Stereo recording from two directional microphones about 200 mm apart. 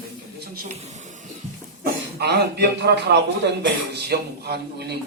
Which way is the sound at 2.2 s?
55° right (ahead or behind).